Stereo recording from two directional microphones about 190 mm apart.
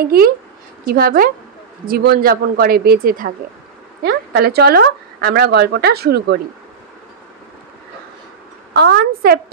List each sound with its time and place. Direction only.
0.8 s speech: 50° right (ahead or behind)
8.7 s speech: 60° right (ahead or behind)